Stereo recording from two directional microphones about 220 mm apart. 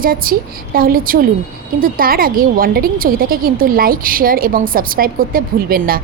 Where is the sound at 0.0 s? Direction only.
40° right (ahead or behind).